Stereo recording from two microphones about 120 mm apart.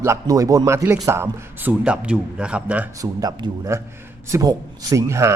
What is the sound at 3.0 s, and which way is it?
A man's voice, 30° right (ahead or behind).